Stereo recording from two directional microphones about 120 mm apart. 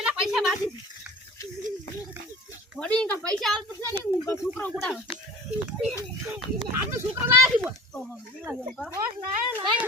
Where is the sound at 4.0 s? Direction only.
25° left (ahead or behind).